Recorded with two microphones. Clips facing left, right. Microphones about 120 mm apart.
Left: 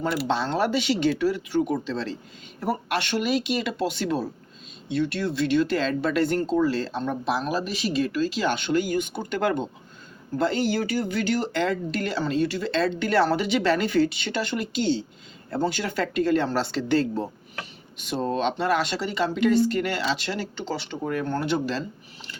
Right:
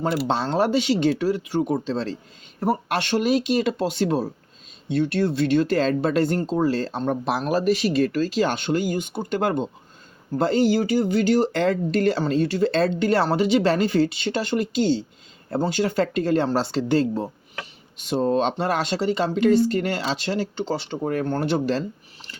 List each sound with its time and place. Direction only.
0.0 s speech: 40° right (ahead or behind)